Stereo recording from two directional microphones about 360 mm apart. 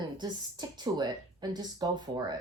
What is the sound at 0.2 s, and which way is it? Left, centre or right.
Speech, centre.